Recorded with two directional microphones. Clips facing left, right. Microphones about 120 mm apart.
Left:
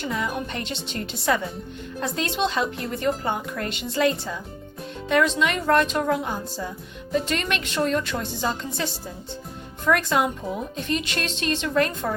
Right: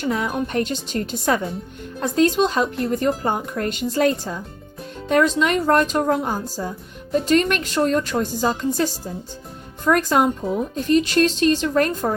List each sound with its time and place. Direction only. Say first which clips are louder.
0.0 s a woman's voice: right 5 dB; 55° right (ahead or behind); by 12.1 s 40° right (ahead or behind)